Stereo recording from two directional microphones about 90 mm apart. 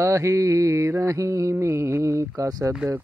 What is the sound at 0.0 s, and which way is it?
Speech, 35° right (ahead or behind).